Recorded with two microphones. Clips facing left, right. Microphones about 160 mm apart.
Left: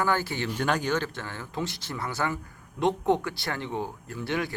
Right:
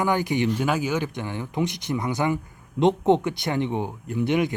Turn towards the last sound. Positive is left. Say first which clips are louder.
# right 8 dB
turn(degrees=-20)  # may be behind; listen again after turning